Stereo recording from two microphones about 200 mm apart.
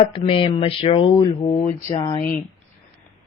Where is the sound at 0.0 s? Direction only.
25° left (ahead or behind).